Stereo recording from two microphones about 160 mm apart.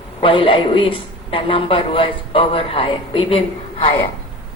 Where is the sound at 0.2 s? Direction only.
35° left (ahead or behind).